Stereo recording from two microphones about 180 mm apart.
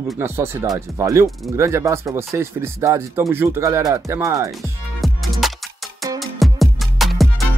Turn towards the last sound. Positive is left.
turn(degrees=0)  # may be behind; listen again after turning